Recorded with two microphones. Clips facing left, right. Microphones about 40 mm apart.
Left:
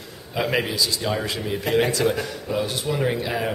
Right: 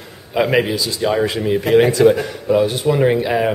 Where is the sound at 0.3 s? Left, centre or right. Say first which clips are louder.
Right 8 dB; centre.